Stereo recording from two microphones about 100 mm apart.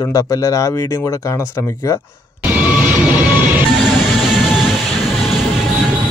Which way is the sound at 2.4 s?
15° right (ahead or behind).